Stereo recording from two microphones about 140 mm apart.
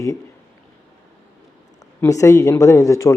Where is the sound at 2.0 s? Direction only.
20° left (ahead or behind).